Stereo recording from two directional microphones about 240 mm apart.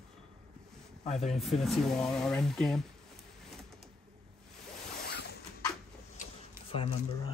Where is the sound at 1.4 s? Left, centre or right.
Centre.